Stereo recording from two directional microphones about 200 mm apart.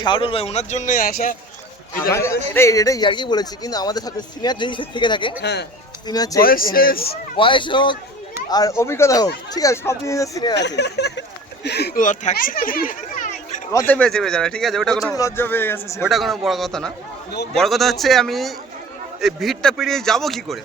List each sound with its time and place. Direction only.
0.0 s speech: 25° left (ahead or behind); by 1.1 s 40° left (ahead or behind)
2.1 s a man's voice: 15° left (ahead or behind)
5.4 s speech: 55° left (ahead or behind)
6.1 s a man's voice: 20° left (ahead or behind)
6.4 s a man's voice: 45° left (ahead or behind)
7.3 s a man's voice: 25° left (ahead or behind)
10.5 s a child's voice: 60° left (ahead or behind); by 13.6 s 40° left (ahead or behind)
13.7 s speech: 10° left (ahead or behind)
15.1 s speech: 15° left (ahead or behind)
16.0 s speech: centre (ahead or behind)